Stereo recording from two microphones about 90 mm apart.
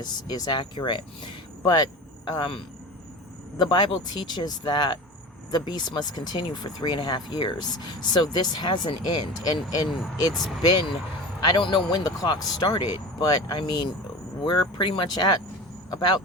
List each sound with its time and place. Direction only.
0.0 s speech: 50° left (ahead or behind)
1.7 s speech: 50° left (ahead or behind)
3.6 s speech: 55° left (ahead or behind)
10.3 s speech: centre (ahead or behind)
10.6 s speech: 50° left (ahead or behind)
11.4 s speech: 65° left (ahead or behind)
12.0 s speech: 45° left (ahead or behind)